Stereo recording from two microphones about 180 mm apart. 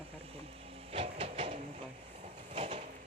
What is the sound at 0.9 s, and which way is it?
Train, 35° right (ahead or behind).